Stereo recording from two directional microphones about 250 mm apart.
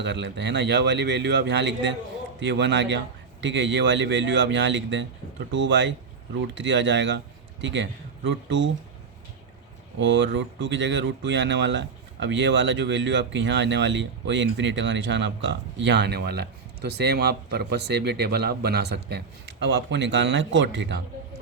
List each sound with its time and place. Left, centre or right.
0.0 s speech: right
10.0 s speech: right